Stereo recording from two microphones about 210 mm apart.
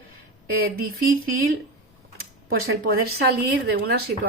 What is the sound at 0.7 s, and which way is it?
Speech, 45° right (ahead or behind).